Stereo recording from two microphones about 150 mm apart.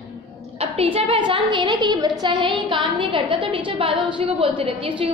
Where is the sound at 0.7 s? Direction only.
40° right (ahead or behind).